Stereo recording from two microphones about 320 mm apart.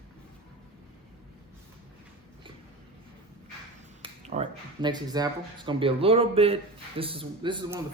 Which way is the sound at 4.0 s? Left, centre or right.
Centre.